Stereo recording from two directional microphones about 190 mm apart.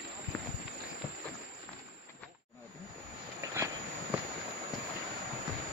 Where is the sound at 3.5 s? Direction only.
15° right (ahead or behind).